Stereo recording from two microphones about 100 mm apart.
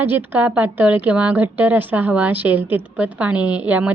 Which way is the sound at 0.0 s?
20° right (ahead or behind).